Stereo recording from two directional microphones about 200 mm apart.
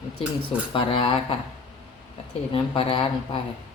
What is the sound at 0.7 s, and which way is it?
Speech, 25° left (ahead or behind).